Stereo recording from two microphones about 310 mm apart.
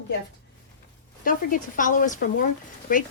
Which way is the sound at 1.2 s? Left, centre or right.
Left.